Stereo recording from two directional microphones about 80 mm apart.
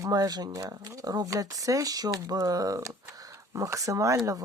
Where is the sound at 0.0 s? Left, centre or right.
Right.